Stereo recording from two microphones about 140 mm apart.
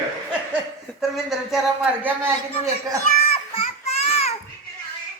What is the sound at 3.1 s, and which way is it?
Children playing, 90° left.